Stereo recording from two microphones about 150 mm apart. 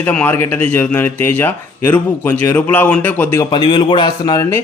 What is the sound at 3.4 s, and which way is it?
A man's voice, 30° left (ahead or behind).